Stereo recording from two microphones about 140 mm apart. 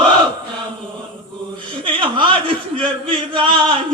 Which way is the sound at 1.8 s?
35° right (ahead or behind).